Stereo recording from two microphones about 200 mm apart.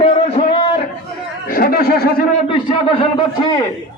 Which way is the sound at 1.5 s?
50° left (ahead or behind).